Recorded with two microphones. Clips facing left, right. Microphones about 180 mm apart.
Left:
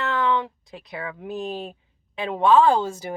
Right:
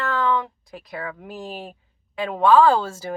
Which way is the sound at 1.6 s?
20° left (ahead or behind).